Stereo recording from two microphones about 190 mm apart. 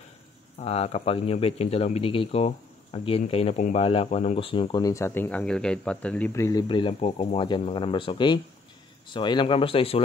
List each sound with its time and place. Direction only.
0.6 s speech: 35° left (ahead or behind)